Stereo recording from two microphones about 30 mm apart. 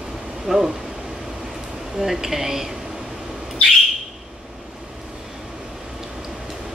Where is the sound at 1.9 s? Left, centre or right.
Centre.